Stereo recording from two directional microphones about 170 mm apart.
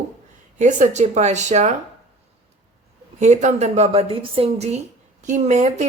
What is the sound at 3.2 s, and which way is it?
A woman's voice, 45° right (ahead or behind).